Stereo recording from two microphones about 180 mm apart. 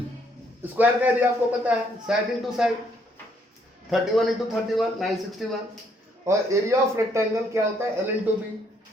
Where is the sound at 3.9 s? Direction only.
Centre (ahead or behind).